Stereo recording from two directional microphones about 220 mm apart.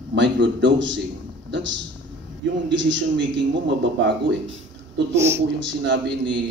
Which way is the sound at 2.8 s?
55° right (ahead or behind).